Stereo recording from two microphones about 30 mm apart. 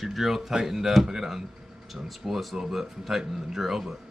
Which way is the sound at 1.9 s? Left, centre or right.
Centre.